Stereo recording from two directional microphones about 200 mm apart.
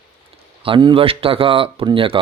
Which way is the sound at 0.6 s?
25° right (ahead or behind).